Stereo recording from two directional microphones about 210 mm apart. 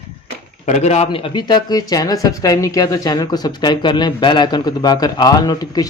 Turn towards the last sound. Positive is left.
turn(degrees=15)  # may be behind; listen again after turning